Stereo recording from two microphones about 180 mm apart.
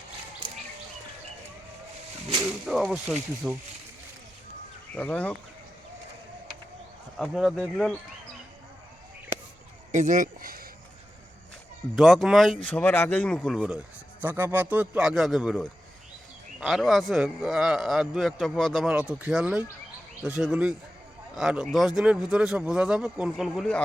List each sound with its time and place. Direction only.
2.6 s a man's voice: 5° right (ahead or behind)
4.9 s speech: 5° left (ahead or behind)
7.2 s a man's voice: centre (ahead or behind)
9.9 s a sound: 45° right (ahead or behind)
11.9 s a man's voice: centre (ahead or behind)
13.6 s a man's voice: 10° right (ahead or behind)